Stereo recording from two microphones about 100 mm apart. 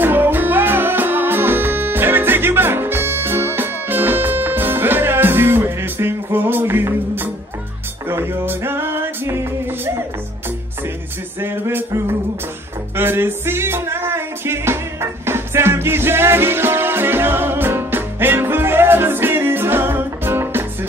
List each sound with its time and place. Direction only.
0.0 s music: 20° right (ahead or behind)
11.4 s music: 25° right (ahead or behind)